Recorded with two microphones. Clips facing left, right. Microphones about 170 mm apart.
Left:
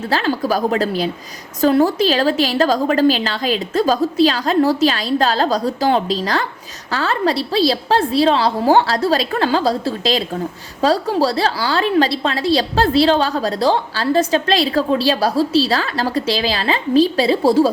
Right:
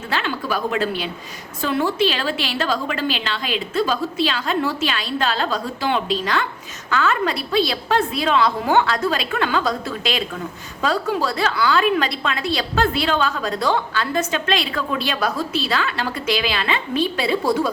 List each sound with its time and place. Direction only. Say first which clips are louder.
0.1 s a woman's voice: left 6 dB; 40° left (ahead or behind)